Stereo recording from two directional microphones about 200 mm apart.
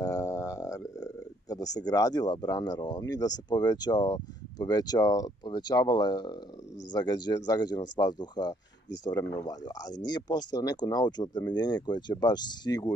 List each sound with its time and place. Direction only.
0.0 s speech: 15° left (ahead or behind)